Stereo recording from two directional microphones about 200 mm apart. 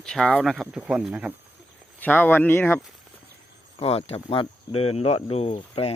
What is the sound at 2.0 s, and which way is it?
Speech, 10° left (ahead or behind).